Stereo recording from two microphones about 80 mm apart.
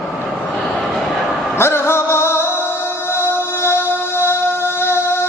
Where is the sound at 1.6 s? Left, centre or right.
Left.